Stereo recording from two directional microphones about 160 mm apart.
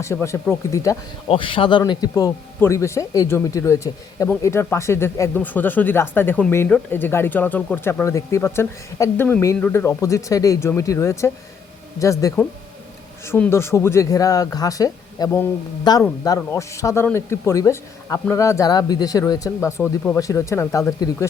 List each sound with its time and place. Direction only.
0.0 s speech: 15° left (ahead or behind)
1.3 s speech: 30° left (ahead or behind)